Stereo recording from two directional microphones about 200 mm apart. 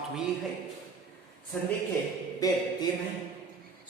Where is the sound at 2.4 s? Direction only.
20° left (ahead or behind).